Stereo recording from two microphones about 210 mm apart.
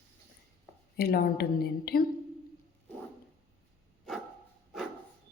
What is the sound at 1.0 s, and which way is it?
A woman's voice, 45° left (ahead or behind).